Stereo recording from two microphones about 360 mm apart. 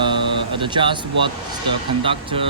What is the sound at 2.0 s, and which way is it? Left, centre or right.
Speech, centre.